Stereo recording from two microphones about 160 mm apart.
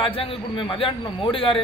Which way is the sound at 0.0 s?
35° left (ahead or behind).